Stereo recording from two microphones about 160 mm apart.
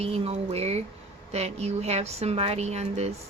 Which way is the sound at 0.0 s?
40° right (ahead or behind).